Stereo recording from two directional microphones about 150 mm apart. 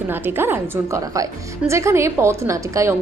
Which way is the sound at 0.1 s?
15° right (ahead or behind).